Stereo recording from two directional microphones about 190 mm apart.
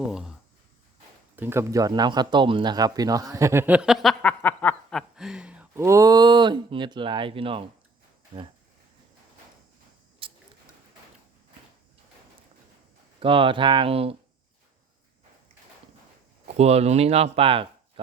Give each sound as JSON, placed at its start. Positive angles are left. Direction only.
{"t": 0.1, "sound": "speech", "side_deg": -5}
{"t": 1.4, "sound": "speech", "side_deg": -10}
{"t": 10.2, "sound": "a sound", "side_deg": -30}
{"t": 13.1, "sound": "speech", "side_deg": -25}
{"t": 16.5, "sound": "speech", "side_deg": -35}